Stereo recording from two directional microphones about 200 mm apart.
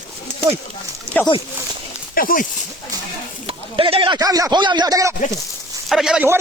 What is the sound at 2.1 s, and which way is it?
Speech, 45° left (ahead or behind).